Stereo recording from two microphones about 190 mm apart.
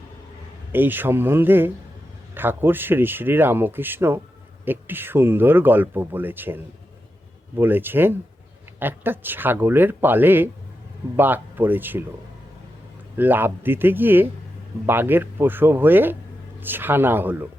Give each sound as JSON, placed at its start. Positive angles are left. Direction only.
{"t": 0.7, "sound": "speech", "side_deg": -10}
{"t": 13.1, "sound": "speech", "side_deg": -10}